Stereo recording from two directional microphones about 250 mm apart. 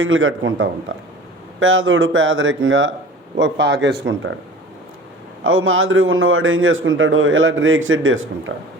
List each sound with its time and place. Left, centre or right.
0.0 s a man's voice: right
5.4 s a man's voice: right